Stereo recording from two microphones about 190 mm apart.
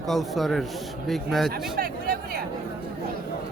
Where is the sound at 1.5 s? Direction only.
50° right (ahead or behind).